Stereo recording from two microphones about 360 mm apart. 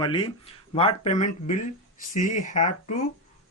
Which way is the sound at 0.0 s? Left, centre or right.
Centre.